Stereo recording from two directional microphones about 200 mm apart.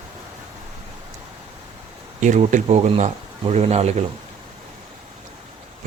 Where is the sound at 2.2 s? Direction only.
35° right (ahead or behind).